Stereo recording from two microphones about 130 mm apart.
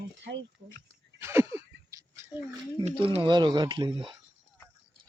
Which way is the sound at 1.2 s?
20° right (ahead or behind).